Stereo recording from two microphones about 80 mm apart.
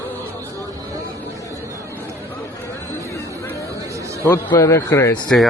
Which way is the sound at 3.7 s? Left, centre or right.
Right.